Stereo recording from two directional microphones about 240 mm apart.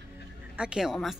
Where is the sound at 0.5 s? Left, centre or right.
Centre.